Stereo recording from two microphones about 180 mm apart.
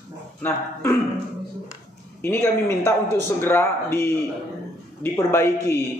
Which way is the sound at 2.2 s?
10° left (ahead or behind).